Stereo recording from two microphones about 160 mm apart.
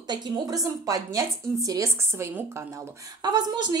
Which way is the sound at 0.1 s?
25° right (ahead or behind).